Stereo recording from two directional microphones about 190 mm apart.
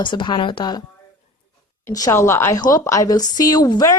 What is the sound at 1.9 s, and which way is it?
A woman's voice, 15° left (ahead or behind).